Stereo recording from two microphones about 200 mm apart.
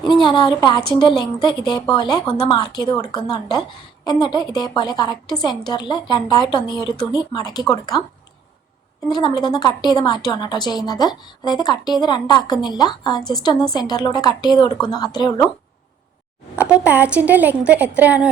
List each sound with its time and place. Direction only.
0.2 s a woman's voice: 25° left (ahead or behind)
9.0 s a woman's voice: 20° left (ahead or behind)
16.6 s a woman's voice: 10° right (ahead or behind)